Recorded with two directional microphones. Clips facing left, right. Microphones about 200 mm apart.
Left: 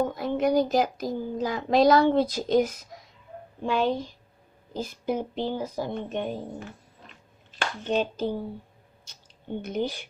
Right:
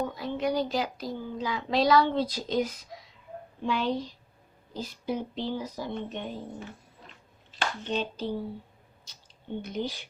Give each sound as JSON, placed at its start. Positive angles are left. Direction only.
{"t": 0.0, "sound": "a woman's voice", "side_deg": 50}
{"t": 7.9, "sound": "a woman's voice", "side_deg": 50}
{"t": 9.6, "sound": "a woman's voice", "side_deg": 50}